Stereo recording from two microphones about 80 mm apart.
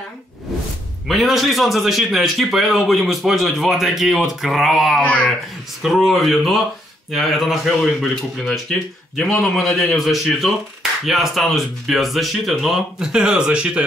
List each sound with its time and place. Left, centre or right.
1.0 s speech: centre
5.0 s speech: centre
5.8 s speech: centre